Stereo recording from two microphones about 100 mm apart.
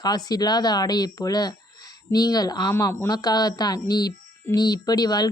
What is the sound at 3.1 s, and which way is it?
A woman's voice, 40° left (ahead or behind).